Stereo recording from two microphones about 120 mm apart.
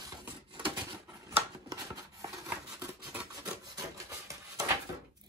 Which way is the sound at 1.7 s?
25° right (ahead or behind).